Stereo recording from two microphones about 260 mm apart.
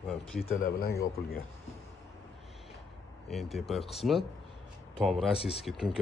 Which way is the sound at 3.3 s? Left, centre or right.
Centre.